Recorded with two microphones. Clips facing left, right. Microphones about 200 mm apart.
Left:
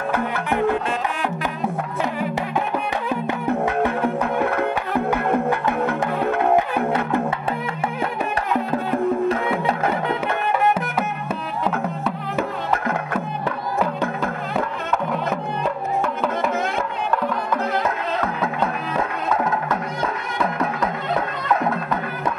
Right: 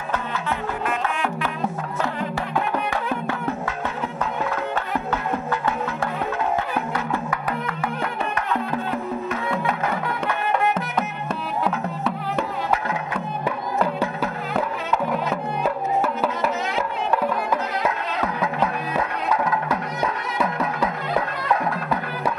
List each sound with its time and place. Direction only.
3.6 s music: 60° left (ahead or behind)
9.7 s music: 25° left (ahead or behind)
11.6 s music: centre (ahead or behind)